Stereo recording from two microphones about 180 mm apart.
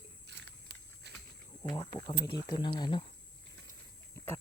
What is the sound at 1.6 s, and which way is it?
Speech, 25° left (ahead or behind).